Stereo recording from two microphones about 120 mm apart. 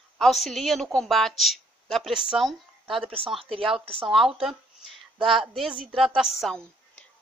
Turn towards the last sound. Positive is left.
turn(degrees=0)  # may be behind; listen again after turning